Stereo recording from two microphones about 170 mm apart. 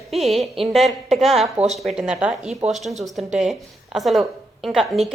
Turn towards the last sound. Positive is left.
turn(degrees=0)  # may be behind; listen again after turning